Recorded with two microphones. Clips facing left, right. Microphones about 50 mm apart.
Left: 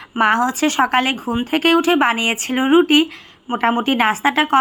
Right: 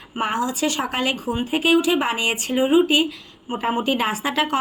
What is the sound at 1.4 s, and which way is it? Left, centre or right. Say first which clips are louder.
Speech: left 3 dB; left.